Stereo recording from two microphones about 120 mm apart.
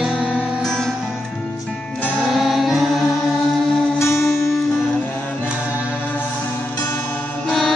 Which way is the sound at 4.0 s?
20° left (ahead or behind).